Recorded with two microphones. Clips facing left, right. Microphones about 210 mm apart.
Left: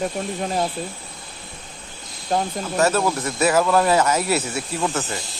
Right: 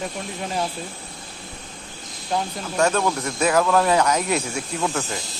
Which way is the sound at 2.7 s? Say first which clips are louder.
Left 1 dB; 5° left (ahead or behind).